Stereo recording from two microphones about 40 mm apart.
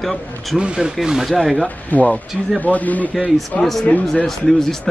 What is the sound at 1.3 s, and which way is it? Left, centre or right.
Speech, centre.